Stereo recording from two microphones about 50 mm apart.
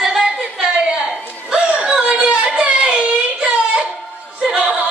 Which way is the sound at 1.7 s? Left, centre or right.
Centre.